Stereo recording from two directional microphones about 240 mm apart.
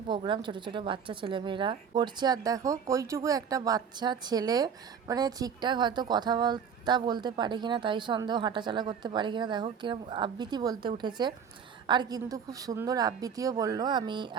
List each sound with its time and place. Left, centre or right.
0.1 s a woman's voice: centre